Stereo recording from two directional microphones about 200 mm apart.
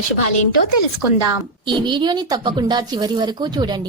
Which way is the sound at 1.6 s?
25° right (ahead or behind).